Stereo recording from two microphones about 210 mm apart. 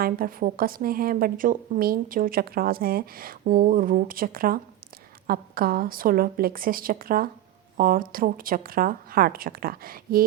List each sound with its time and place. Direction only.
0.0 s a woman's voice: 45° right (ahead or behind)